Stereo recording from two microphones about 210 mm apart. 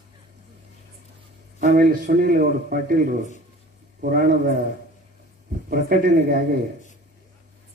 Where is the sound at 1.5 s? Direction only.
45° right (ahead or behind).